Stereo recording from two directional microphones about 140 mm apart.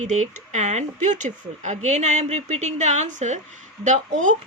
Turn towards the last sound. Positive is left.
turn(degrees=-60)  # may be behind; listen again after turning